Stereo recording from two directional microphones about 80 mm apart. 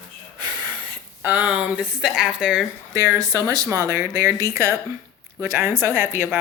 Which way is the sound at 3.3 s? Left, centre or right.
Right.